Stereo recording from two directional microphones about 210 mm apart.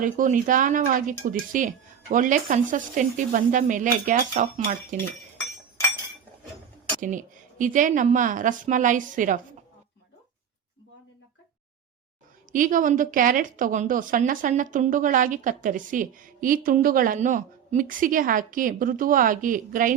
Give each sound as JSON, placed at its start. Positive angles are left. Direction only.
{"t": 0.0, "sound": "a woman's voice", "side_deg": -40}
{"t": 7.0, "sound": "a woman's voice", "side_deg": -40}
{"t": 12.5, "sound": "a woman's voice", "side_deg": -40}